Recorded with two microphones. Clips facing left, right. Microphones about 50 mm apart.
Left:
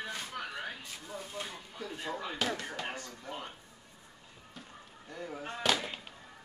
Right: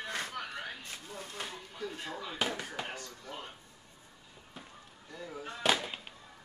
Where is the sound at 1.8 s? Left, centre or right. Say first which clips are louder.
Left 2 dB; centre.